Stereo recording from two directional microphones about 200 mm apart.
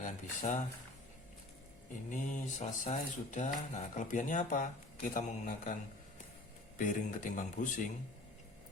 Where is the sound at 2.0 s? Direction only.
40° left (ahead or behind).